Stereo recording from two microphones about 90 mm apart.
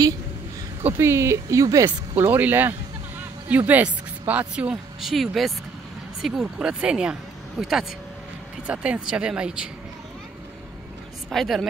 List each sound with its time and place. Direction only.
0.8 s speech: 30° right (ahead or behind)
1.9 s speech: 20° right (ahead or behind)
11.2 s speech: centre (ahead or behind)